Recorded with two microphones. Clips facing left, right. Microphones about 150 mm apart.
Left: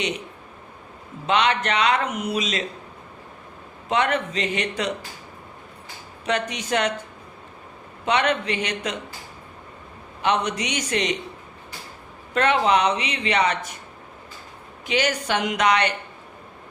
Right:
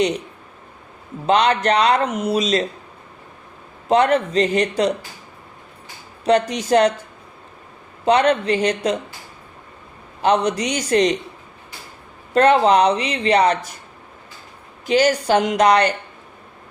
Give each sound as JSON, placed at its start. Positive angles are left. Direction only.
{"t": 1.3, "sound": "speech", "side_deg": -35}
{"t": 3.8, "sound": "speech", "side_deg": -35}
{"t": 6.2, "sound": "speech", "side_deg": -35}
{"t": 8.0, "sound": "speech", "side_deg": -35}
{"t": 10.2, "sound": "speech", "side_deg": -35}
{"t": 12.3, "sound": "speech", "side_deg": -35}
{"t": 14.8, "sound": "speech", "side_deg": -35}